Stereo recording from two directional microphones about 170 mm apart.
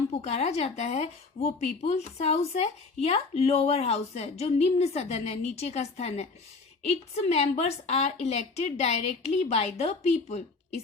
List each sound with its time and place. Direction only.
0.2 s speech: 40° left (ahead or behind)